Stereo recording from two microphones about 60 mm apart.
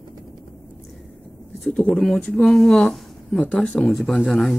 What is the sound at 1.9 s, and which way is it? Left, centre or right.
Speech, centre.